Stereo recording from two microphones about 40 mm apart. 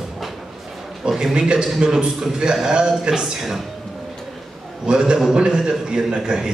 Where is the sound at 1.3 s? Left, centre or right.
Centre.